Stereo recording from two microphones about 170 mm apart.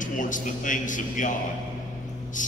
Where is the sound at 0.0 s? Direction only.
50° left (ahead or behind).